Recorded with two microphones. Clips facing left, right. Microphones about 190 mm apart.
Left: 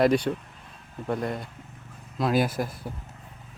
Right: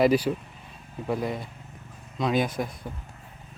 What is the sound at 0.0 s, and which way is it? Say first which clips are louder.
Speech: right 1 dB; 5° right (ahead or behind).